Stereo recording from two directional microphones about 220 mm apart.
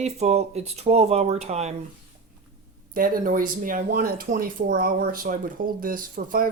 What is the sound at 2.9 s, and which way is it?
Speech, 40° right (ahead or behind).